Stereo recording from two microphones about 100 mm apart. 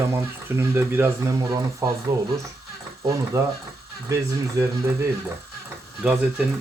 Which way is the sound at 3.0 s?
35° right (ahead or behind).